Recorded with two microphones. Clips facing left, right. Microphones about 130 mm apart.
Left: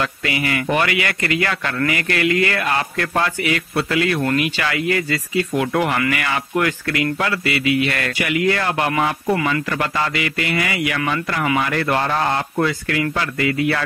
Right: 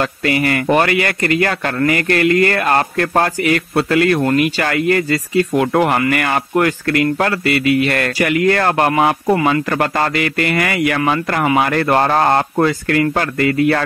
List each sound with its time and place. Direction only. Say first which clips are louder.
0.0 s speech: right 6 dB; 45° right (ahead or behind)
9.3 s speech: right 4 dB; 35° right (ahead or behind)
9.7 s speech: right 5 dB; 50° right (ahead or behind)